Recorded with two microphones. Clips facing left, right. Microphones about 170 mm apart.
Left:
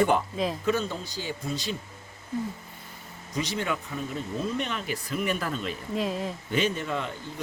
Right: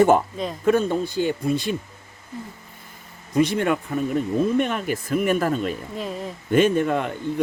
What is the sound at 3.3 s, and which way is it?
Speech, 55° right (ahead or behind).